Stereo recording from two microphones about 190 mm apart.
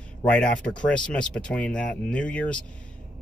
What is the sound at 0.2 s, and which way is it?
A man's voice, 5° left (ahead or behind).